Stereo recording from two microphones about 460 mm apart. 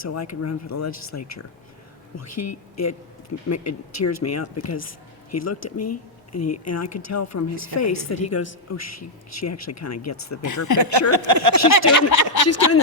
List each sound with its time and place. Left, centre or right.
0.0 s speech: left
11.1 s a sound: right
11.8 s speech: left